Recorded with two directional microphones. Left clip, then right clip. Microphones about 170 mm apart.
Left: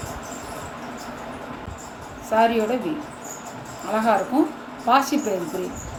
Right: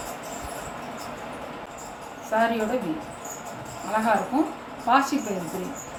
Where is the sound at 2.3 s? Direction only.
45° left (ahead or behind).